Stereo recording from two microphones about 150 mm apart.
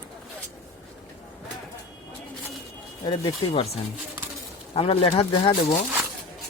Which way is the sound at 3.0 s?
35° left (ahead or behind).